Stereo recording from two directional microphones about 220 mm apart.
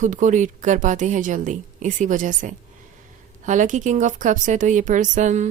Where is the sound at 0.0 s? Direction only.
35° right (ahead or behind).